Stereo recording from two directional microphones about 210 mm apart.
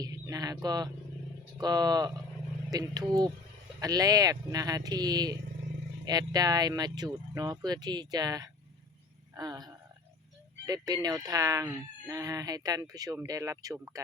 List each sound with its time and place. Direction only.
0.0 s speech: 15° right (ahead or behind)
9.3 s a sound: 15° right (ahead or behind)
10.7 s speech: 20° right (ahead or behind)